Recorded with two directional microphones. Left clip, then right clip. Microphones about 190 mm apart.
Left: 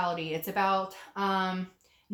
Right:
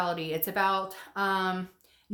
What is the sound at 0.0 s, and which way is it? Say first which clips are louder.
Speech: right 1 dB; 40° right (ahead or behind).